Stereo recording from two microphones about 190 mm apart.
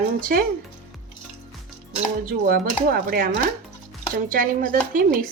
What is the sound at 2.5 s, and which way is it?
A woman's voice, 50° right (ahead or behind).